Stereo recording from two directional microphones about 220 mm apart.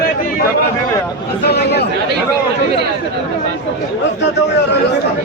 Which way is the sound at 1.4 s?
45° left (ahead or behind).